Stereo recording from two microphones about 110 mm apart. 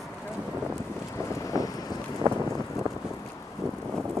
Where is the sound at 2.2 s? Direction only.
35° right (ahead or behind).